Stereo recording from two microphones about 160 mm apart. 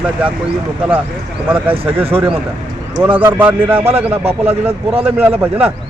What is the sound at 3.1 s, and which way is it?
A man's voice, 10° right (ahead or behind).